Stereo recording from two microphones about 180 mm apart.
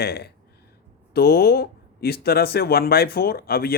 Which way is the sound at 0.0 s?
65° left (ahead or behind).